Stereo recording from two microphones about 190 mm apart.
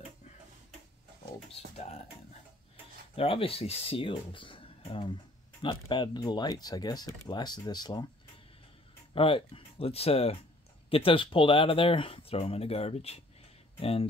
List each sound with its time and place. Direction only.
3.2 s speech: 30° left (ahead or behind)
9.1 s speech: 30° left (ahead or behind)